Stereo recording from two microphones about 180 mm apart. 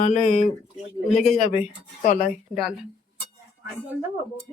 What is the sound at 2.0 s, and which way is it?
Speech, 45° left (ahead or behind).